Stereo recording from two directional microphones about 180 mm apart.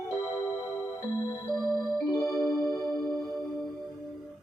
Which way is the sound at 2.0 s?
20° left (ahead or behind).